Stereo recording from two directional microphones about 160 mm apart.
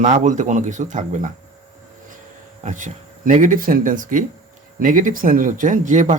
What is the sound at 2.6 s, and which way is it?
Speech, 50° right (ahead or behind).